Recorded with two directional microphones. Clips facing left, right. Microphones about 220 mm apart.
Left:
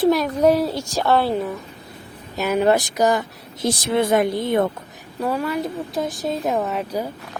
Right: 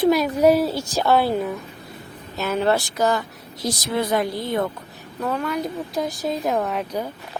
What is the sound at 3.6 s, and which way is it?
Speech, 25° left (ahead or behind).